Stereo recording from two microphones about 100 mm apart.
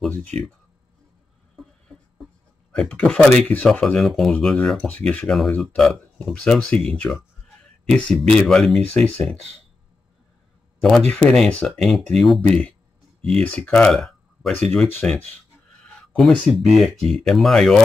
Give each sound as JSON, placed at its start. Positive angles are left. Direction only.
{"t": 2.7, "sound": "speech", "side_deg": 10}
{"t": 10.8, "sound": "speech", "side_deg": 5}
{"t": 13.7, "sound": "a sound", "side_deg": 10}
{"t": 14.5, "sound": "speech", "side_deg": 15}
{"t": 16.2, "sound": "speech", "side_deg": 0}